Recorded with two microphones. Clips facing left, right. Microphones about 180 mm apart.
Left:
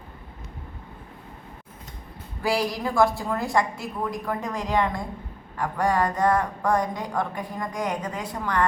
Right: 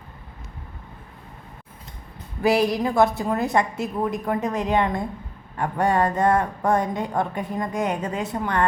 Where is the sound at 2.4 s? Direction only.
20° right (ahead or behind).